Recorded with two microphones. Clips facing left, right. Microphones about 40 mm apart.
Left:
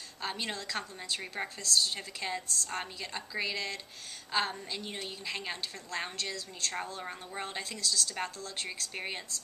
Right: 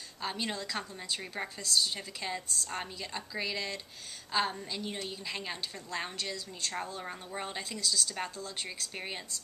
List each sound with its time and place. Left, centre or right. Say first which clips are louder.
0.2 s a woman's voice: right 1 dB; centre